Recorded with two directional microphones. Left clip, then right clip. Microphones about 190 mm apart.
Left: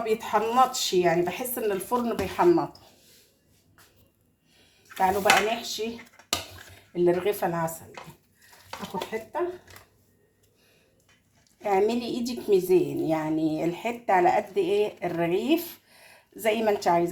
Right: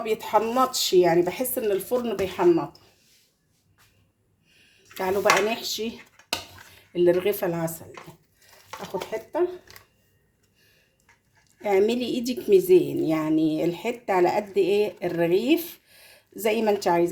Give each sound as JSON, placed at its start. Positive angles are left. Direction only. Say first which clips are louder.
{"t": 0.0, "sound": "a woman's voice", "louder": "right 2 dB", "side_deg": -45}
{"t": 4.9, "sound": "a woman's voice", "louder": "even", "side_deg": -35}
{"t": 6.9, "sound": "a woman's voice", "louder": "right 3 dB", "side_deg": -35}
{"t": 11.6, "sound": "a woman's voice", "louder": "right 2 dB", "side_deg": -35}